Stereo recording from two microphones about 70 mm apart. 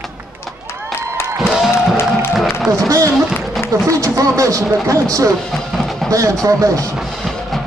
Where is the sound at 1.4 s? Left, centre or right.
Centre.